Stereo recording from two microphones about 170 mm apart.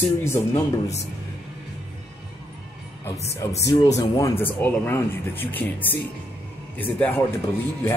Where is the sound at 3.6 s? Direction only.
20° left (ahead or behind).